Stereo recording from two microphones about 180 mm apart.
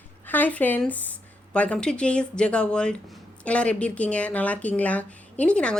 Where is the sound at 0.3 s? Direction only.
10° left (ahead or behind).